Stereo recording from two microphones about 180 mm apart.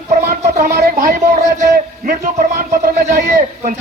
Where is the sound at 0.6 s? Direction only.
55° right (ahead or behind).